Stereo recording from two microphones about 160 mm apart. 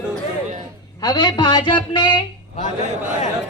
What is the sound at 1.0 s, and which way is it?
Speech, 25° left (ahead or behind).